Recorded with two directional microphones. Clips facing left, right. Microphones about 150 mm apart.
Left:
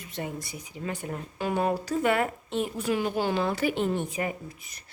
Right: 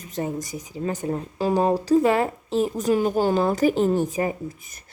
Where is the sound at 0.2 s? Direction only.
40° right (ahead or behind).